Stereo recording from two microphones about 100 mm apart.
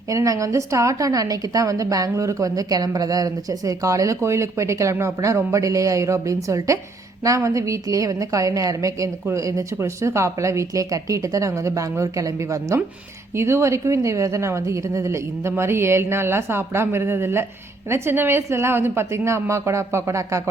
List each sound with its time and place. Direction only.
0.1 s a woman's voice: 35° right (ahead or behind)